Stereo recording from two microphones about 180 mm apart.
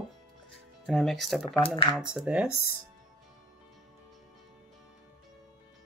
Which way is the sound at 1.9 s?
5° right (ahead or behind).